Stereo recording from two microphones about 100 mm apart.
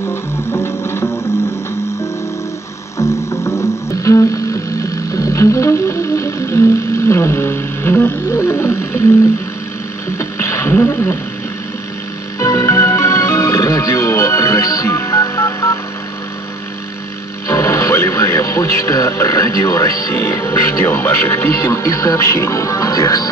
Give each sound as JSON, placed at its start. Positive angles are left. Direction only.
{"t": 0.0, "sound": "music", "side_deg": 25}
{"t": 3.0, "sound": "music", "side_deg": 30}
{"t": 10.1, "sound": "music", "side_deg": 30}
{"t": 12.4, "sound": "music", "side_deg": 30}
{"t": 17.5, "sound": "speech", "side_deg": 30}